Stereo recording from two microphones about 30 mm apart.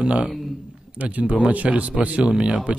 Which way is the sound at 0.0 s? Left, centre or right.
Right.